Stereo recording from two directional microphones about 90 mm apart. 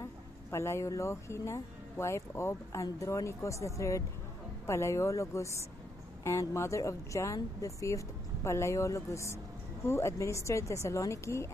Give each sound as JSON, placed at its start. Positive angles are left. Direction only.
{"t": 0.0, "sound": "speech", "side_deg": 30}